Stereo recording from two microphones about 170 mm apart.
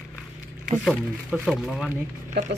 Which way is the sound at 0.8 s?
Centre (ahead or behind).